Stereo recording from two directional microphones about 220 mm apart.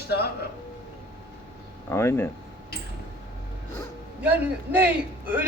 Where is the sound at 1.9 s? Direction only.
10° left (ahead or behind).